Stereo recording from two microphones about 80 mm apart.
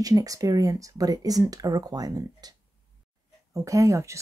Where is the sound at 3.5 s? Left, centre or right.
Right.